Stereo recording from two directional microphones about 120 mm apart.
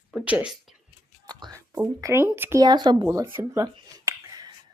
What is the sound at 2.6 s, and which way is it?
Speech, 40° right (ahead or behind).